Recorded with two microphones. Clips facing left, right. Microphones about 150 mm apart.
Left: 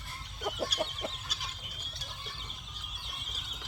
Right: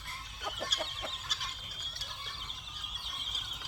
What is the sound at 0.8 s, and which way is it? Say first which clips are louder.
Chicken: left 5 dB; 15° left (ahead or behind).